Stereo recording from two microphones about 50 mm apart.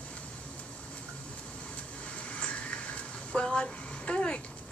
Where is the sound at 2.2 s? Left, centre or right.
Left.